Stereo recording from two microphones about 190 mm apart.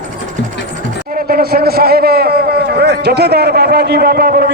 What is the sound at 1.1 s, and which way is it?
A man's voice, 50° right (ahead or behind).